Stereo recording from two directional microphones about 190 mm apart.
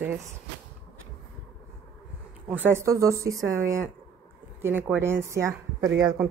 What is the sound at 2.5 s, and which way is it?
A woman's voice, 10° right (ahead or behind).